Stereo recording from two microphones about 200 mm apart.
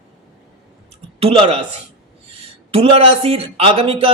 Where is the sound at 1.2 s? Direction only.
30° right (ahead or behind).